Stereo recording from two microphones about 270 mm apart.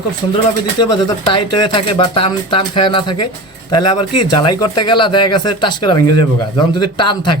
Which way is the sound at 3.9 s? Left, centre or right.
Left.